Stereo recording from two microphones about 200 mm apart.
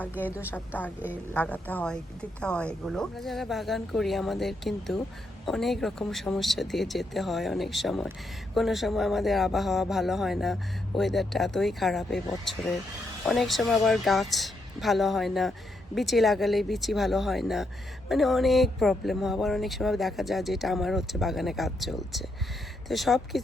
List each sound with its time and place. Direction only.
0.3 s a woman's voice: 10° right (ahead or behind)
1.3 s speech: 10° left (ahead or behind)
13.2 s speech: centre (ahead or behind)